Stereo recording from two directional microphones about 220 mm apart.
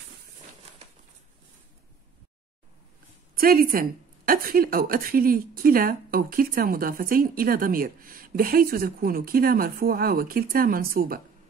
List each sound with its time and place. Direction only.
3.3 s a woman's voice: 40° right (ahead or behind)